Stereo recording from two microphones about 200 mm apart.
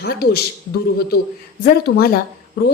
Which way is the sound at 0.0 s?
50° left (ahead or behind).